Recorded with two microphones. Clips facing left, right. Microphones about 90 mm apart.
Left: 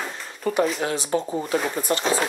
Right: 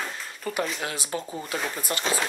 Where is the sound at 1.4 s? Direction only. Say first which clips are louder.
Left 6 dB; 5° left (ahead or behind).